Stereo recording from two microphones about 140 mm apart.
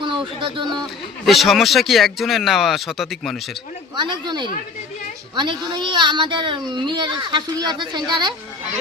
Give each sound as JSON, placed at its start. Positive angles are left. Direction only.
{"t": 0.0, "sound": "speech", "side_deg": -35}
{"t": 1.2, "sound": "speech", "side_deg": 0}
{"t": 3.9, "sound": "speech", "side_deg": -30}